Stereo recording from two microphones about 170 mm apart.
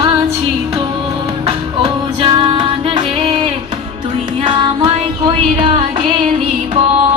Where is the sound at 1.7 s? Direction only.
30° right (ahead or behind).